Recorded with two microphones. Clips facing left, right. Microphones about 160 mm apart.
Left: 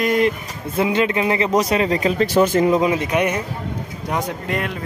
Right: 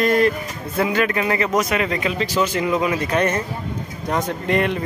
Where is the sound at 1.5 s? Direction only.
35° left (ahead or behind).